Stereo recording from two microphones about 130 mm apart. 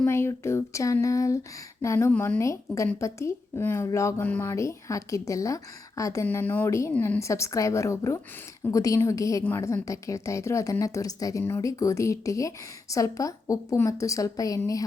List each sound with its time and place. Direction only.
0.0 s a woman's voice: 20° left (ahead or behind)
6.2 s a woman's voice: 15° left (ahead or behind)
6.9 s a woman's voice: 10° left (ahead or behind)
7.2 s a woman's voice: 25° left (ahead or behind)